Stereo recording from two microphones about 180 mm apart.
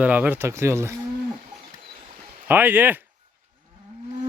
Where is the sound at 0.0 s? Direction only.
10° right (ahead or behind).